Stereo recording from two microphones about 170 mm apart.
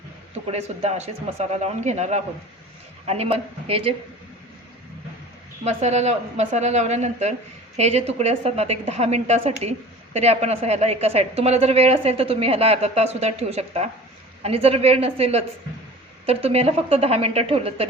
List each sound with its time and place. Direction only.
0.4 s a woman's voice: 40° right (ahead or behind)
5.6 s a woman's voice: 40° right (ahead or behind)